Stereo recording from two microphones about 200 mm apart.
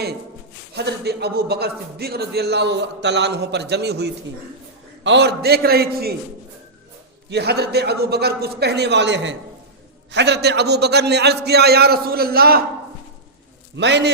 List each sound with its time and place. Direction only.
0.7 s a man's voice: 55° right (ahead or behind)
7.3 s a man's voice: 55° right (ahead or behind)
13.7 s a man's voice: 60° right (ahead or behind)